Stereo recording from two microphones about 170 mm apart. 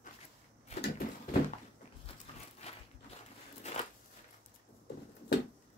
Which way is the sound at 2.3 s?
30° left (ahead or behind).